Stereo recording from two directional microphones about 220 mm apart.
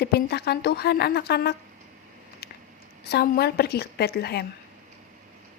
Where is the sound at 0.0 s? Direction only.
45° left (ahead or behind).